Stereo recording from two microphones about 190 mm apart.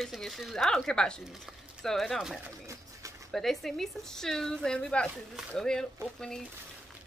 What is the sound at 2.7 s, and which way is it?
Bird, 15° right (ahead or behind).